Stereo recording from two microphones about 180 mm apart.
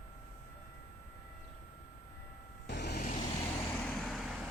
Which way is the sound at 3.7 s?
10° left (ahead or behind).